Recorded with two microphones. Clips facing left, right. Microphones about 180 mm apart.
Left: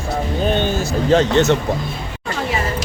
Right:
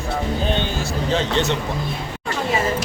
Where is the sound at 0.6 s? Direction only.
50° left (ahead or behind).